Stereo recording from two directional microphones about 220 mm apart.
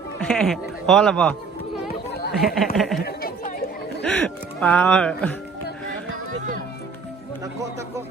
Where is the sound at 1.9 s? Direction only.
45° left (ahead or behind).